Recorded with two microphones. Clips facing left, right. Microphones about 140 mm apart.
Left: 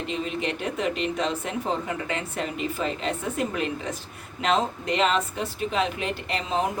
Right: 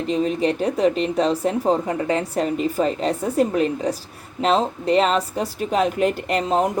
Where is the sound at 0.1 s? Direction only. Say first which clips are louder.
Right 10 dB; 35° right (ahead or behind).